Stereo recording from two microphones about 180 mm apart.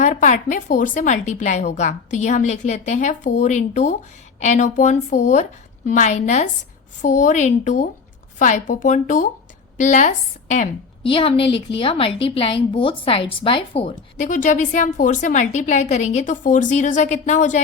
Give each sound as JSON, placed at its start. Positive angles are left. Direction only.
{"t": 0.0, "sound": "a woman's voice", "side_deg": 45}
{"t": 11.1, "sound": "a woman's voice", "side_deg": 30}